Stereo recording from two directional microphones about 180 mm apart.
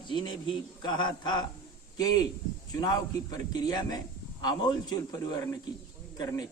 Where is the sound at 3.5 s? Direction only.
20° left (ahead or behind).